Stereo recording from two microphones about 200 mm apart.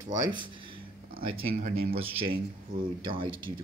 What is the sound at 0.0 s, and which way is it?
Speech, 20° right (ahead or behind).